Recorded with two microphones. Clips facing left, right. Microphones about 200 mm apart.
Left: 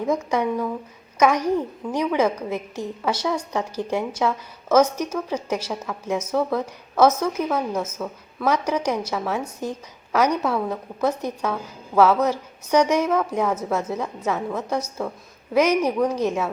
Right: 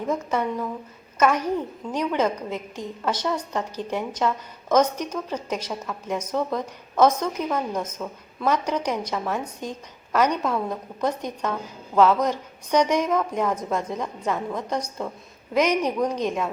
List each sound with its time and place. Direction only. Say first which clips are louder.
0.0 s a woman's voice: left 3 dB; 10° left (ahead or behind)